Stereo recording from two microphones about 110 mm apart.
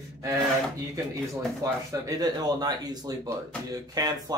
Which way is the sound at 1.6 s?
30° right (ahead or behind).